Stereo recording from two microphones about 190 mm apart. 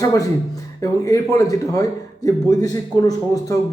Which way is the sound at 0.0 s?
15° left (ahead or behind).